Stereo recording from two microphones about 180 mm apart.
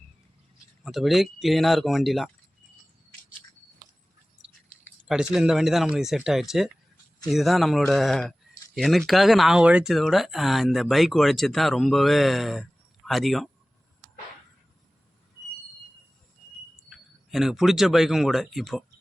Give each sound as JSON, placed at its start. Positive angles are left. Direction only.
{"t": 0.9, "sound": "speech", "side_deg": 0}
{"t": 5.3, "sound": "speech", "side_deg": -5}
{"t": 16.9, "sound": "speech", "side_deg": 0}